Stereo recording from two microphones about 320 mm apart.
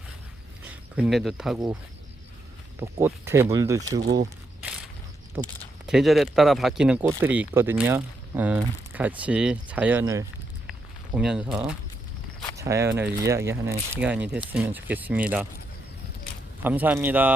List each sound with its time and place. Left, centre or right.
0.7 s speech: centre
2.8 s speech: centre
4.0 s speech: right
5.4 s speech: centre
10.7 s a sound: centre
11.5 s speech: centre
16.6 s speech: centre